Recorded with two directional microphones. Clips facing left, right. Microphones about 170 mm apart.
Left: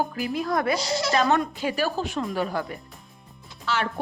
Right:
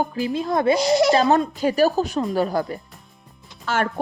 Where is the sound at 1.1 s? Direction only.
35° right (ahead or behind).